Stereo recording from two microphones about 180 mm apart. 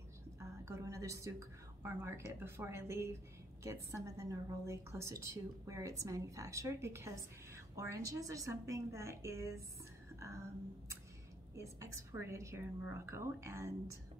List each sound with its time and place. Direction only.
0.4 s a woman's voice: 15° right (ahead or behind)
11.5 s a woman's voice: 15° right (ahead or behind)